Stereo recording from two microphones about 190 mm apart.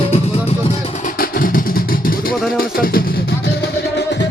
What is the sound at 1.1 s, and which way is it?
Vehicle, 50° left (ahead or behind).